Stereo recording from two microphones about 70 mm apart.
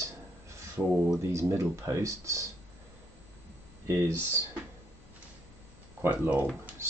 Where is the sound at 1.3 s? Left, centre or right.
Right.